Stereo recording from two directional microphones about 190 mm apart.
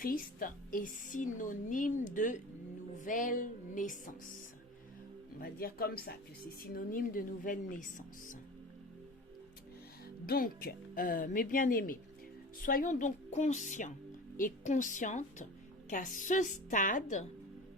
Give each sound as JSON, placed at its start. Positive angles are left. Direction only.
{"t": 0.0, "sound": "a woman's voice", "side_deg": 45}
{"t": 5.4, "sound": "a woman's voice", "side_deg": 50}
{"t": 10.2, "sound": "a woman's voice", "side_deg": 50}